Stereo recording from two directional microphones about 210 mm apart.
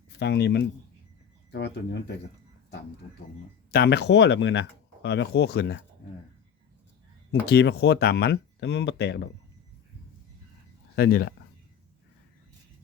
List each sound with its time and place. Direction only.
0.2 s speech: 55° left (ahead or behind)
3.7 s speech: 50° left (ahead or behind)
7.4 s speech: 50° left (ahead or behind)
10.9 s speech: 45° left (ahead or behind)